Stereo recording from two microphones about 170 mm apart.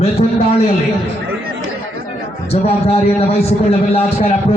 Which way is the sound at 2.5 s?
35° left (ahead or behind).